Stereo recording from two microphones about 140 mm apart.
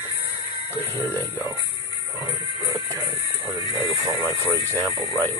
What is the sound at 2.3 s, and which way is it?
Music, 20° right (ahead or behind).